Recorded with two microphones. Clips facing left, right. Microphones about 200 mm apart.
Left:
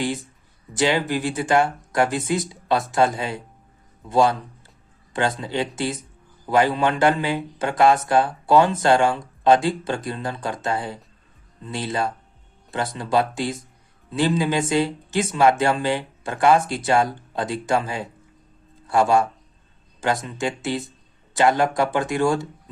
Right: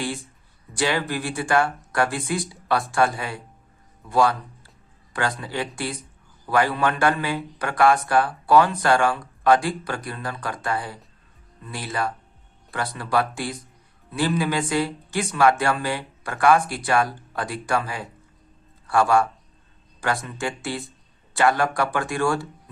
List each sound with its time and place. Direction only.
0.0 s a man's voice: 20° left (ahead or behind)